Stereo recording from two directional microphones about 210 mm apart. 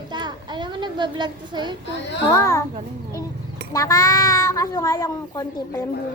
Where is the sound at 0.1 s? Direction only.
20° right (ahead or behind).